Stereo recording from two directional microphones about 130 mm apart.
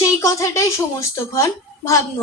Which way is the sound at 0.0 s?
25° left (ahead or behind).